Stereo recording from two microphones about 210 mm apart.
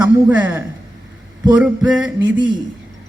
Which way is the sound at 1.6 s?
5° right (ahead or behind).